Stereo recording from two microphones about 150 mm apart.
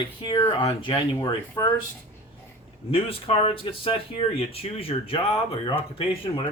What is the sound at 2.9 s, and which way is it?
Speech, 40° left (ahead or behind).